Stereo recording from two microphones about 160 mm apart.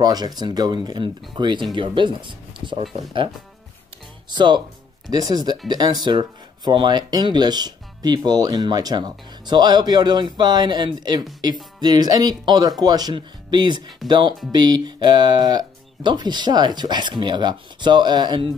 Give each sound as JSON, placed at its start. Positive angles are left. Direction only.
{"t": 0.0, "sound": "speech", "side_deg": -25}
{"t": 4.3, "sound": "speech", "side_deg": -30}